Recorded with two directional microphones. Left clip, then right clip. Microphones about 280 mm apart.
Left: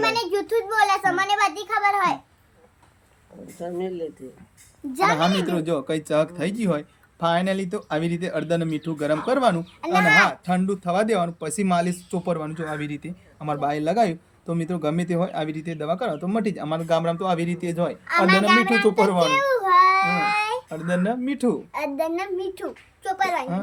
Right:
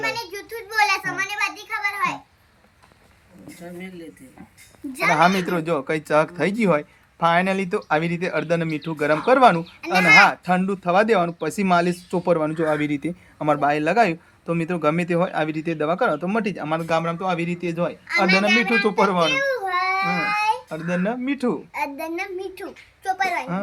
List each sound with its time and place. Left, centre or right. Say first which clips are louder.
0.0 s a sound: left 5 dB; left
5.5 s speech: right 2 dB; centre
9.8 s a child's voice: right 3 dB; centre
10.2 s speech: right 4 dB; centre
18.3 s a child's voice: left 1 dB; centre
18.8 s speech: even; centre
19.3 s a sound: left 3 dB; centre
20.7 s speech: even; centre
21.7 s a child's voice: left 2 dB; centre